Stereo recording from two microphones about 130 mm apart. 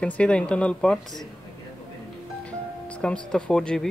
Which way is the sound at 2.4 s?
10° left (ahead or behind).